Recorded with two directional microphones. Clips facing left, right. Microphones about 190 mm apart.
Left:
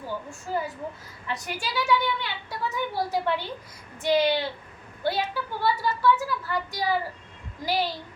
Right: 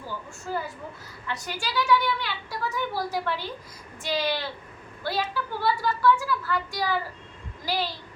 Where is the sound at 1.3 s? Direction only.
20° left (ahead or behind).